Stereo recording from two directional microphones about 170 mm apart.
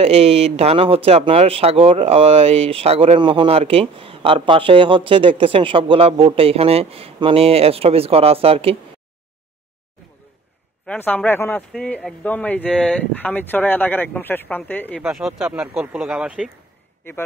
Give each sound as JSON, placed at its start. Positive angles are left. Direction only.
{"t": 0.0, "sound": "speech", "side_deg": -35}
{"t": 10.9, "sound": "a man's voice", "side_deg": 10}
{"t": 15.0, "sound": "speech", "side_deg": 0}
{"t": 17.0, "sound": "a man's voice", "side_deg": 15}